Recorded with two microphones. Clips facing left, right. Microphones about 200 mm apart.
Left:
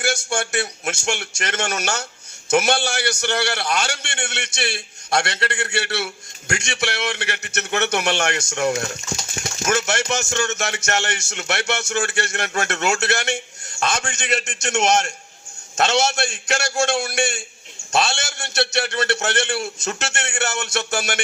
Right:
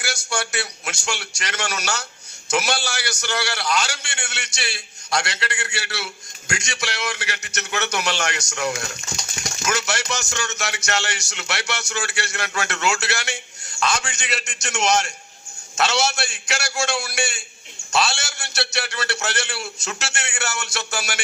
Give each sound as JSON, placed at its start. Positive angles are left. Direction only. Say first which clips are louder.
{"t": 0.3, "sound": "a man's voice", "louder": "left 3 dB", "side_deg": 50}
{"t": 8.9, "sound": "speech", "louder": "left 5 dB", "side_deg": 30}
{"t": 9.6, "sound": "a man's voice", "louder": "left 4 dB", "side_deg": 50}